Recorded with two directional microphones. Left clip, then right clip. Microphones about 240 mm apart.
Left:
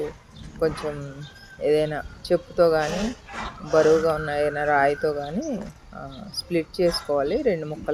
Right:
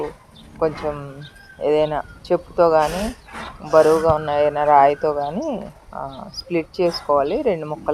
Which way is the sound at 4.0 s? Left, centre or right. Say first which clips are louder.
Right 6 dB; centre.